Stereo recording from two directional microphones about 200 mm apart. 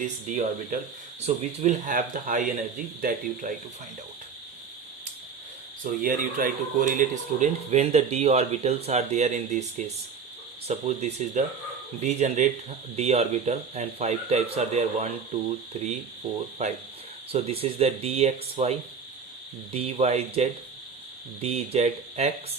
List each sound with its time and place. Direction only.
0.0 s speech: 40° right (ahead or behind)
5.8 s speech: 45° right (ahead or behind)